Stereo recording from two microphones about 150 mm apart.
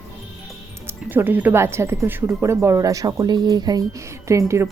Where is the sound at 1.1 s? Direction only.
10° right (ahead or behind).